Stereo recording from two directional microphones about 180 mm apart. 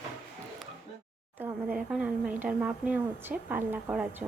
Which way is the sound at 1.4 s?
5° right (ahead or behind).